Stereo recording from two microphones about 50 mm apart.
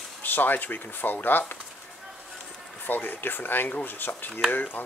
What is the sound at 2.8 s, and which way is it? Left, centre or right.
Speech, left.